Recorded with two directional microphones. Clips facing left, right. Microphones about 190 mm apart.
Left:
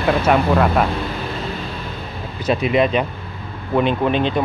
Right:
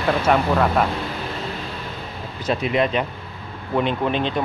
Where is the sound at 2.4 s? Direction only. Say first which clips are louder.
Left 4 dB; 15° left (ahead or behind).